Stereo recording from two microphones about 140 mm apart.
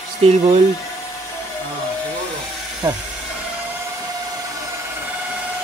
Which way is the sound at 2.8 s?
25° right (ahead or behind).